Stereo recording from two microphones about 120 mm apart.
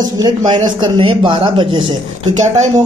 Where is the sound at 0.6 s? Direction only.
45° right (ahead or behind).